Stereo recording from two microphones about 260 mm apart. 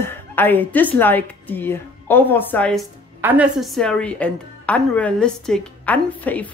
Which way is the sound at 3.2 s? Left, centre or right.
Centre.